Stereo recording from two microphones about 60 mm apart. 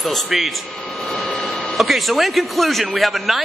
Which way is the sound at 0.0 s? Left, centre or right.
Centre.